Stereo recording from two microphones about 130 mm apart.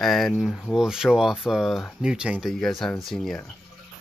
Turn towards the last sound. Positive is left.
turn(degrees=5)  # may be behind; listen again after turning